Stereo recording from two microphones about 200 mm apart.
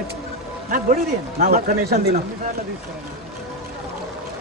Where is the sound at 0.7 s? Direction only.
45° right (ahead or behind).